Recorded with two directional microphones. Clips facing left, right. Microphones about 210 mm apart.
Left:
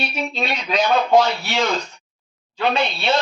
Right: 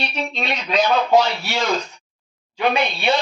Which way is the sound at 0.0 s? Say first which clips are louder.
Left 1 dB; 5° left (ahead or behind).